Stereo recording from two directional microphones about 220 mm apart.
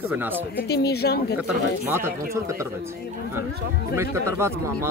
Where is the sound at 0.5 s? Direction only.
50° left (ahead or behind).